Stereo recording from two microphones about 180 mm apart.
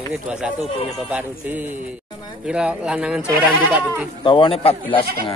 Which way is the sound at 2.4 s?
5° right (ahead or behind).